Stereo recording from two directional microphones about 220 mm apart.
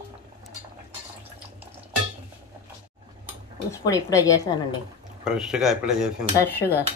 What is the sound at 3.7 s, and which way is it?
A woman's voice, 15° left (ahead or behind).